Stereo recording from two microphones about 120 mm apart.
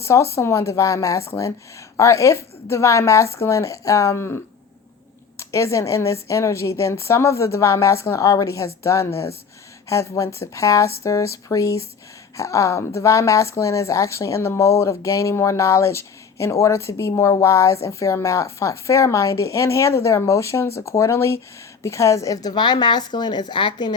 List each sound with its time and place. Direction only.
0.0 s a woman's voice: 25° left (ahead or behind)
5.4 s a woman's voice: 25° left (ahead or behind)